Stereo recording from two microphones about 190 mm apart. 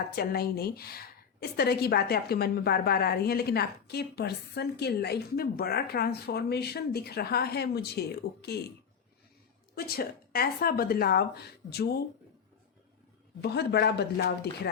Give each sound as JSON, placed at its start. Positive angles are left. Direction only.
{"t": 0.2, "sound": "a woman's voice", "side_deg": 55}
{"t": 9.7, "sound": "a woman's voice", "side_deg": 55}
{"t": 13.4, "sound": "a woman's voice", "side_deg": 60}